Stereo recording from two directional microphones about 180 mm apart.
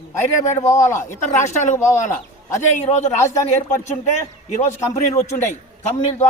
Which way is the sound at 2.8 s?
40° left (ahead or behind).